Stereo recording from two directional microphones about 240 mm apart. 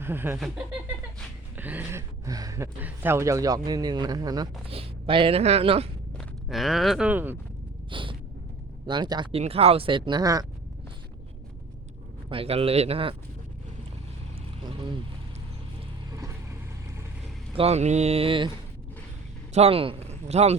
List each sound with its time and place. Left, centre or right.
0.0 s speech: centre
1.5 s speech: centre; by 5.9 s right
6.1 s speech: centre
7.9 s a sound: right
8.9 s speech: centre
12.3 s speech: right
16.1 s vehicle: centre
17.5 s speech: right
19.5 s speech: right